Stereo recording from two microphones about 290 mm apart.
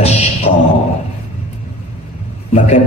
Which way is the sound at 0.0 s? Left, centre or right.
Left.